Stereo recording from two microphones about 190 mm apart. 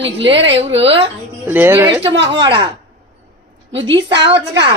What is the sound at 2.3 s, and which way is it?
Speech, 25° right (ahead or behind).